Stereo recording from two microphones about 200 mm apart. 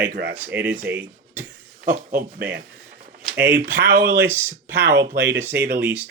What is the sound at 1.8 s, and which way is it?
Speech, 35° right (ahead or behind).